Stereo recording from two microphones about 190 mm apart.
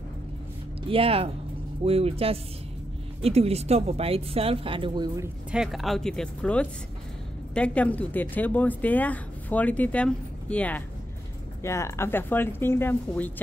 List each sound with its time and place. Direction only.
0.8 s speech: 30° right (ahead or behind)
5.5 s speech: centre (ahead or behind)